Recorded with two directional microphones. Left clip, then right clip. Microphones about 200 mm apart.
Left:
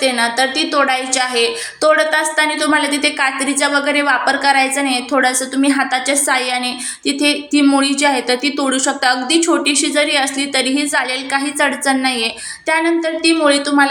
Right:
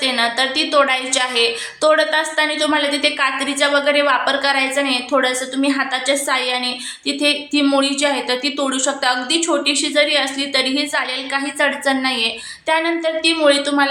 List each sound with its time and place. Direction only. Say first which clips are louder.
0.0 s a woman's voice: left 2 dB; 10° left (ahead or behind)